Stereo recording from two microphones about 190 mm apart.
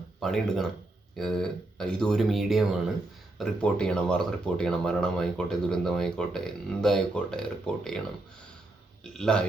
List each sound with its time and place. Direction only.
0.2 s speech: centre (ahead or behind)
9.1 s speech: 5° left (ahead or behind)